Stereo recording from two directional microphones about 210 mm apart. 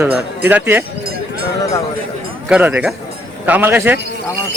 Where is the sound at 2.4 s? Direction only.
5° right (ahead or behind).